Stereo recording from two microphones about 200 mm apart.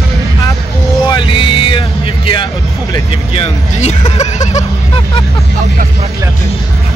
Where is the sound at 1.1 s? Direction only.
25° left (ahead or behind).